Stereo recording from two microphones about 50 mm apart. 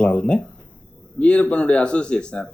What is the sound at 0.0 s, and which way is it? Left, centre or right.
Speech, left.